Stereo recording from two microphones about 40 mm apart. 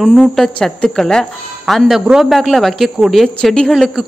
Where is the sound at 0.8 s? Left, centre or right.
Centre.